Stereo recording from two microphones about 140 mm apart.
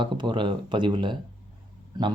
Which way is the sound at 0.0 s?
35° right (ahead or behind).